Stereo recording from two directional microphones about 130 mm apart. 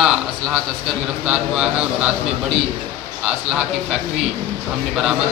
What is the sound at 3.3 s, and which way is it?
Speech, 5° right (ahead or behind).